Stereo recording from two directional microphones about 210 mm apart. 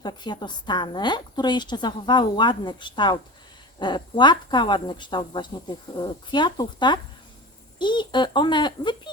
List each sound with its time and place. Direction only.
0.0 s speech: 20° left (ahead or behind)